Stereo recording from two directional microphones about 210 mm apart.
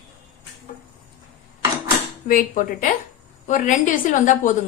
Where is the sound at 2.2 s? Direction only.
40° left (ahead or behind).